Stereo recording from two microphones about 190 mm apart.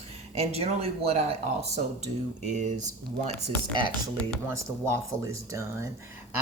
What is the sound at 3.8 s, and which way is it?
Speech, 25° right (ahead or behind).